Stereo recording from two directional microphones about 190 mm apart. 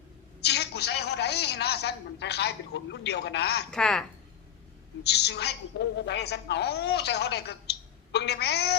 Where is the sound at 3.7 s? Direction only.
5° left (ahead or behind).